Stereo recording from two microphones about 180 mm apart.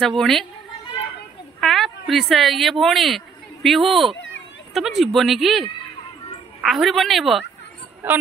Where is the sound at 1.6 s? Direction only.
Centre (ahead or behind).